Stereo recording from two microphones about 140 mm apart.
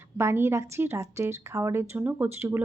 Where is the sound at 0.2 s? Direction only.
20° right (ahead or behind).